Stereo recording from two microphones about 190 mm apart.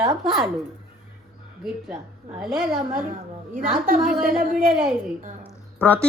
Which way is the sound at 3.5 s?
45° right (ahead or behind).